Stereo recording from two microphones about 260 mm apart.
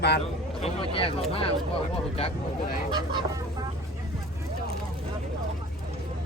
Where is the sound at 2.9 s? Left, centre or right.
Centre.